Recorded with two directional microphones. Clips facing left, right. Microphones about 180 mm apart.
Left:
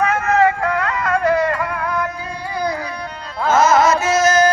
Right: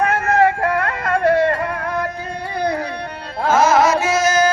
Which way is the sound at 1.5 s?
50° right (ahead or behind).